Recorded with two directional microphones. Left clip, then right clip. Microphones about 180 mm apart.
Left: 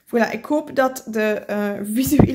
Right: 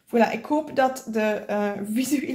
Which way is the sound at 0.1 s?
35° left (ahead or behind).